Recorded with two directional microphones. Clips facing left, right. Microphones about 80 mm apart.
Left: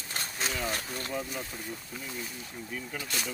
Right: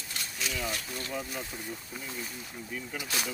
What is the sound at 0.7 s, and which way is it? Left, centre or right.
Speech, left.